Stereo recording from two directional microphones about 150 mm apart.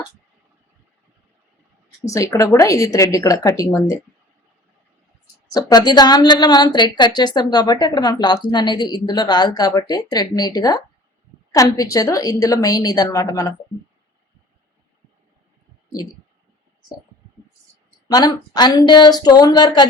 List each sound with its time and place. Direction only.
2.0 s a woman's voice: 20° left (ahead or behind)
5.5 s a woman's voice: 25° left (ahead or behind)
18.1 s a woman's voice: 25° left (ahead or behind)